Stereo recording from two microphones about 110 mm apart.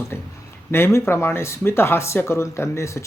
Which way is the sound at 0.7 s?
20° left (ahead or behind).